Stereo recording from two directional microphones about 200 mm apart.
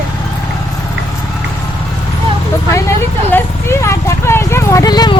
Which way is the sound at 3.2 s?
10° left (ahead or behind).